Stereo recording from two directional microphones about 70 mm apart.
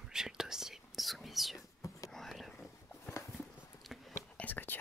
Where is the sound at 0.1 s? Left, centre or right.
Centre.